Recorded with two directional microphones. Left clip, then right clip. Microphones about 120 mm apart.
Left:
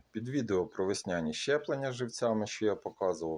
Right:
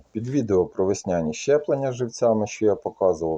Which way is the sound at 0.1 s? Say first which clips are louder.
Right 10 dB; 25° left (ahead or behind).